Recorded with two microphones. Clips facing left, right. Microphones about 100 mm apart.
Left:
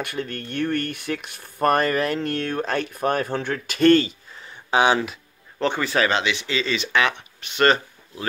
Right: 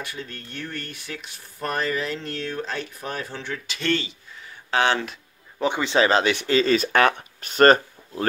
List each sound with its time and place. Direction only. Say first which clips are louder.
0.0 s speech: left 6 dB; 60° left (ahead or behind)
4.6 s speech: left 3 dB; 15° left (ahead or behind)
5.6 s speech: right 1 dB; 15° right (ahead or behind)
6.1 s speech: right 4 dB; 45° right (ahead or behind)